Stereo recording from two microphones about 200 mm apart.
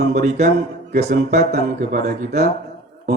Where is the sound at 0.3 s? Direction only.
35° right (ahead or behind).